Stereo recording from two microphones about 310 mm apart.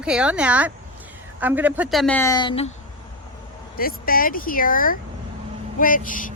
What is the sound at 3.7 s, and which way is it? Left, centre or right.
A woman's voice, left.